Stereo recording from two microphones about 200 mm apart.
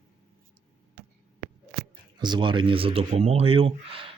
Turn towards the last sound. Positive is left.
turn(degrees=-25)  # may be behind; listen again after turning